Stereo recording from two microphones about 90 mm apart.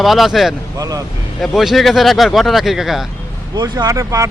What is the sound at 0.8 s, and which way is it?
Speech, 40° right (ahead or behind).